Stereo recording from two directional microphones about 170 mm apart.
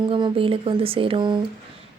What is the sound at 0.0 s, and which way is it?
Speech, 30° right (ahead or behind).